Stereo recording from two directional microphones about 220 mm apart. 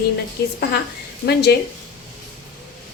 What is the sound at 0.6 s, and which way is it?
Speech, 50° left (ahead or behind).